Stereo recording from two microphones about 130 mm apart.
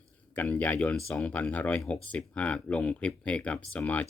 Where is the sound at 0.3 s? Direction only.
10° left (ahead or behind).